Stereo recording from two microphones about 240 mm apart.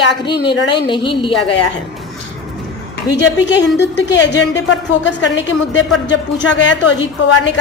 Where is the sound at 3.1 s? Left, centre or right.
Left.